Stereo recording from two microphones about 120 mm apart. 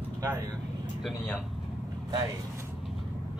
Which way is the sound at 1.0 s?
5° left (ahead or behind).